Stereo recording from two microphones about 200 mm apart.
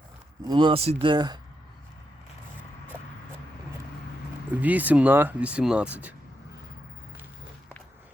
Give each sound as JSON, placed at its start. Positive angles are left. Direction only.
{"t": 0.4, "sound": "speech", "side_deg": -25}
{"t": 2.9, "sound": "a sound", "side_deg": -10}
{"t": 4.6, "sound": "speech", "side_deg": -10}